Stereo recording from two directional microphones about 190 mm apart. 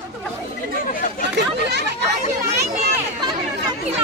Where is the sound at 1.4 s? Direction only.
60° right (ahead or behind).